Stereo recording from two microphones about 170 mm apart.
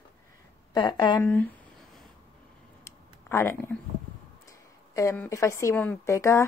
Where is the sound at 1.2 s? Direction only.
10° left (ahead or behind).